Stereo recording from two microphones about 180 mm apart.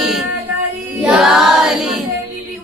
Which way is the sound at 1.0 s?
5° right (ahead or behind).